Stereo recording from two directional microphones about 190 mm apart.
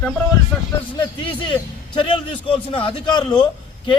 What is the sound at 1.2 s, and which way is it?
A man's voice, 25° left (ahead or behind).